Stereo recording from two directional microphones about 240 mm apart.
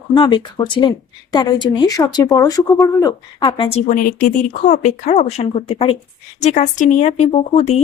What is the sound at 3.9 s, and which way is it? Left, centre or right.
Speech, left.